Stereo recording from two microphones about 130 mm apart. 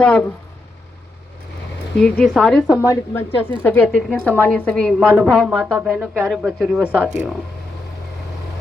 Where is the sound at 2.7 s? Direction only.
20° left (ahead or behind).